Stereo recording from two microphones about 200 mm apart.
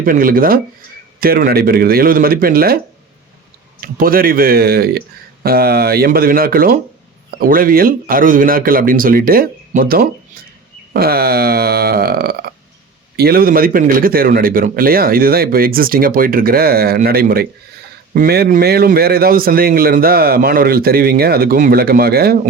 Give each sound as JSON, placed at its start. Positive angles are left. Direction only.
{"t": 0.0, "sound": "a man's voice", "side_deg": -45}
{"t": 3.8, "sound": "a man's voice", "side_deg": -45}